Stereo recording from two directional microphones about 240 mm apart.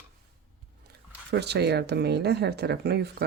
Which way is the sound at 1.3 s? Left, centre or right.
Right.